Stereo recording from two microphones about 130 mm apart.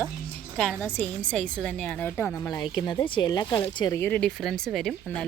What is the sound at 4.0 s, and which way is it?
Speech, 10° left (ahead or behind).